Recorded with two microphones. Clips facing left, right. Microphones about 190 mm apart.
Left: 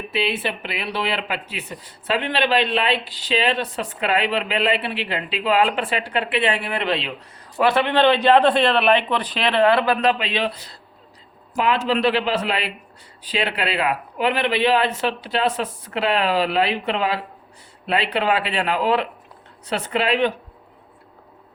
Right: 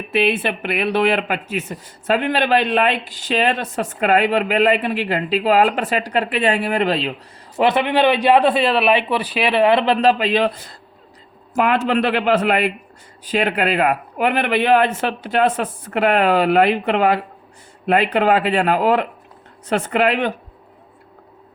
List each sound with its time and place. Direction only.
0.1 s speech: 50° right (ahead or behind)
7.6 s a man's voice: 20° right (ahead or behind); by 20.3 s 50° right (ahead or behind)